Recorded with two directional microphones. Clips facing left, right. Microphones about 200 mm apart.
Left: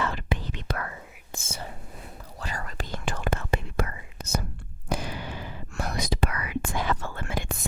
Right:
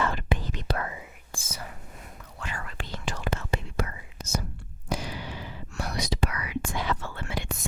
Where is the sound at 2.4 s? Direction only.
40° left (ahead or behind).